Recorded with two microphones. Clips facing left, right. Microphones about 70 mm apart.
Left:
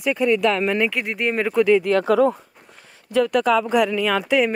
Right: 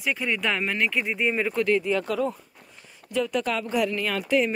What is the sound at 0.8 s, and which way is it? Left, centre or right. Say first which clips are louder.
Speech: left 2 dB; left.